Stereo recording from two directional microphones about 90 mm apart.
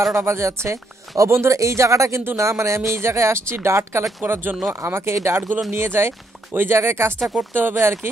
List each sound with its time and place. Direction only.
0.1 s speech: 30° right (ahead or behind)